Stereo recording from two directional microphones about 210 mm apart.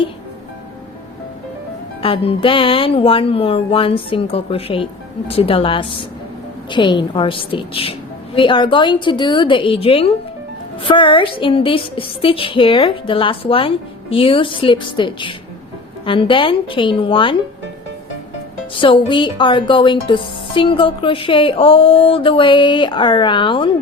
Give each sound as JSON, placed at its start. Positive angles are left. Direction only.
{"t": 2.0, "sound": "speech", "side_deg": 25}
{"t": 18.7, "sound": "speech", "side_deg": 25}